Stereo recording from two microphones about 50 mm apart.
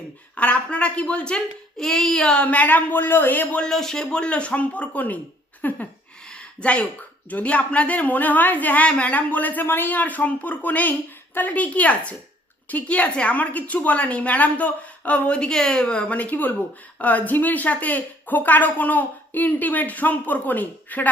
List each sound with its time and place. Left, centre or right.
0.3 s a woman's voice: left
1.8 s child singing: centre
2.5 s speech: left
3.7 s a woman's voice: centre; by 5.8 s left
6.3 s a sound: left
7.3 s a woman's voice: left